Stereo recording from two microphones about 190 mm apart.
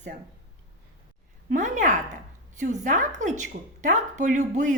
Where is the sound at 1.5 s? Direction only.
40° right (ahead or behind).